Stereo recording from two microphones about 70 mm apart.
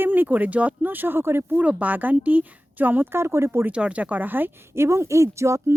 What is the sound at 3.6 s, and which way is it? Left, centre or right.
Speech, centre.